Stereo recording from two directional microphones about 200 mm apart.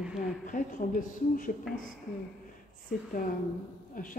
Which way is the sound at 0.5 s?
40° left (ahead or behind).